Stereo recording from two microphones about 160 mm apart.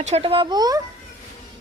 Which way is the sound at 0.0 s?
40° right (ahead or behind).